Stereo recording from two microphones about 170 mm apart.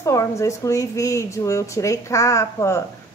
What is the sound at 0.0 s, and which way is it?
A woman's voice, 15° left (ahead or behind).